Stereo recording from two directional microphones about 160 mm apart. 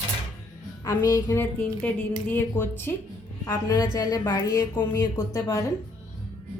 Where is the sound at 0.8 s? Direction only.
20° left (ahead or behind).